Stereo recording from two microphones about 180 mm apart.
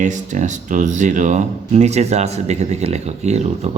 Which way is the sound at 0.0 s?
45° right (ahead or behind).